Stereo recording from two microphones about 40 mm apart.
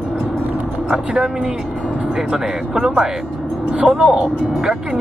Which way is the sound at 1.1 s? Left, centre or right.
Centre.